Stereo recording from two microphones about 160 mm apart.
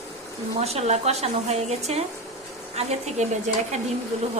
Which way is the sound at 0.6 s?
40° right (ahead or behind).